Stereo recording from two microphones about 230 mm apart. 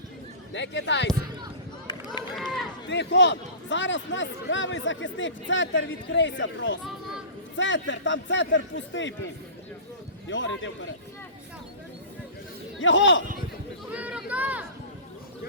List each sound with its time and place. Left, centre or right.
0.5 s a man's voice: left
1.9 s run: centre
2.3 s run: centre
2.9 s a man's voice: left
10.2 s a man's voice: left
12.8 s a man's voice: left
13.9 s speech: centre